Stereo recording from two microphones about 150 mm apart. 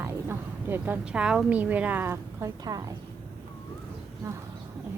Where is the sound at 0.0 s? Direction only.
15° right (ahead or behind).